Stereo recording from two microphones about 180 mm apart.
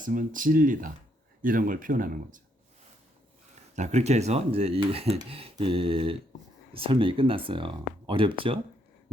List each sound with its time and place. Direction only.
0.0 s speech: 50° right (ahead or behind)
3.8 s speech: 40° right (ahead or behind)